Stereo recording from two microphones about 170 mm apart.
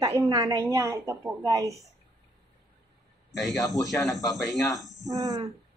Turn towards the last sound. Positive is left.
turn(degrees=-20)  # may be behind; listen again after turning